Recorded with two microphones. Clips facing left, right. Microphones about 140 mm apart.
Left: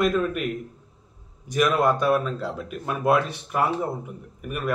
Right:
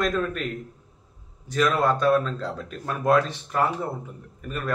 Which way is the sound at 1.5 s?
15° left (ahead or behind).